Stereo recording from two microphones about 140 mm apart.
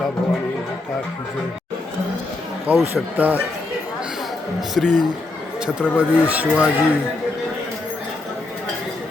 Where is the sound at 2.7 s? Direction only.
10° right (ahead or behind).